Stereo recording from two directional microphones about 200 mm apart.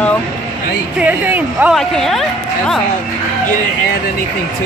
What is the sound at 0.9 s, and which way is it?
A woman's voice, 10° right (ahead or behind).